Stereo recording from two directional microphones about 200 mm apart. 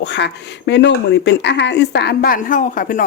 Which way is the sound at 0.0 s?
60° left (ahead or behind).